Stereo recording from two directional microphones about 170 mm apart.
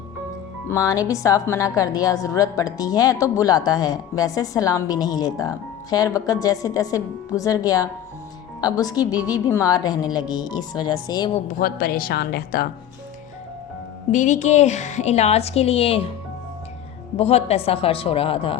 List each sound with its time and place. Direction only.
0.7 s a woman's voice: 20° left (ahead or behind)
11.6 s a woman's voice: 60° left (ahead or behind)
14.1 s a woman's voice: 45° left (ahead or behind)
17.2 s a woman's voice: 35° left (ahead or behind)